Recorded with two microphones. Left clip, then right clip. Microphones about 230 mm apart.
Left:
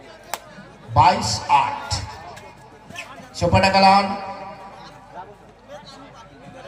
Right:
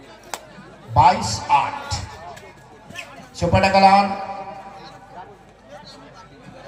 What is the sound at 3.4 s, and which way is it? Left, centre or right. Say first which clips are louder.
A man's voice: even; left.